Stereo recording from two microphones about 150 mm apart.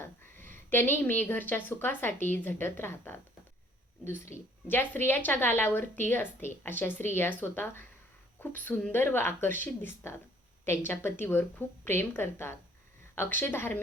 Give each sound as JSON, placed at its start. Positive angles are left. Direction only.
{"t": 0.0, "sound": "a woman's voice", "side_deg": 15}